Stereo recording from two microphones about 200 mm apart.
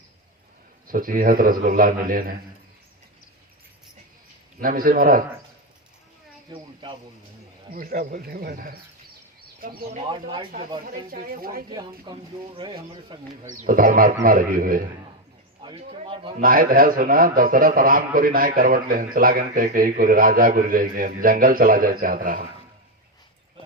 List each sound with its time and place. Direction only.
0.9 s a man's voice: 45° right (ahead or behind)
4.6 s a man's voice: 45° right (ahead or behind)
6.5 s speech: 25° right (ahead or behind)
7.7 s a man's voice: 45° right (ahead or behind)
10.0 s speech: 25° right (ahead or behind)
11.1 s a man's voice: 45° right (ahead or behind)
11.7 s speech: 20° right (ahead or behind)
13.5 s a man's voice: 40° right (ahead or behind)
15.6 s speech: 30° right (ahead or behind)
16.4 s a man's voice: 45° right (ahead or behind)